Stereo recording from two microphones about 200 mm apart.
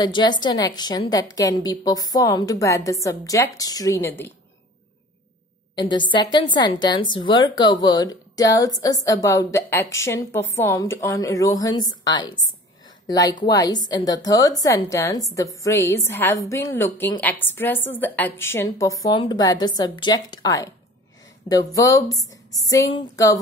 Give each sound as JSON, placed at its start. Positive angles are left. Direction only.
{"t": 0.0, "sound": "a woman's voice", "side_deg": 20}
{"t": 5.8, "sound": "a woman's voice", "side_deg": 25}